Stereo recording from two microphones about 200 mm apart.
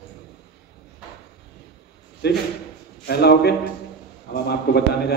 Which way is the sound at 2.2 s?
55° left (ahead or behind).